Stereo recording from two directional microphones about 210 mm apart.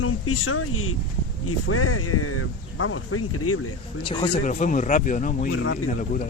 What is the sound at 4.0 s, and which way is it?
Speech, 25° left (ahead or behind).